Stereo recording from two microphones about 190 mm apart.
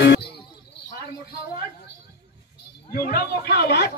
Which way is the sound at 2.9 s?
55° left (ahead or behind).